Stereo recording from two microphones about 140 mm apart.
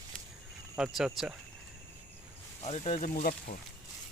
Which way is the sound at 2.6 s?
55° left (ahead or behind).